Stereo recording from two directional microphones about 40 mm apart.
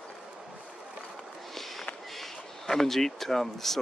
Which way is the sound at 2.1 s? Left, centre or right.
Centre.